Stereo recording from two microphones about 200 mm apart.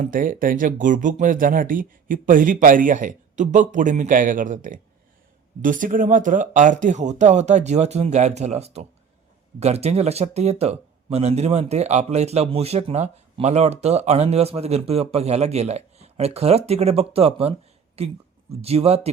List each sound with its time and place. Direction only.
0.0 s speech: 45° right (ahead or behind)